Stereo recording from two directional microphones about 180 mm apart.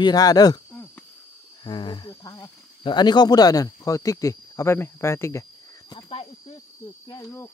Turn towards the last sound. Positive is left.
turn(degrees=15)  # may be behind; listen again after turning